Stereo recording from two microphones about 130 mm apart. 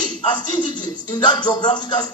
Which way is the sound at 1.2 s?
35° left (ahead or behind).